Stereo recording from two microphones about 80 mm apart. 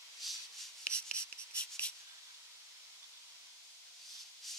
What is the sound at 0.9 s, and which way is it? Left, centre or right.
Writing, centre.